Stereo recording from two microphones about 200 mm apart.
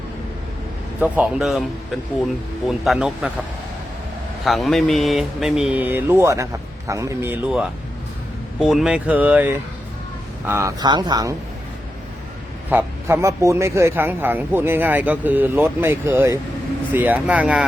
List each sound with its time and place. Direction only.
0.9 s speech: 5° right (ahead or behind)
2.6 s a man's voice: centre (ahead or behind)
4.4 s speech: centre (ahead or behind); by 11.3 s 20° right (ahead or behind)
12.7 s speech: 15° right (ahead or behind)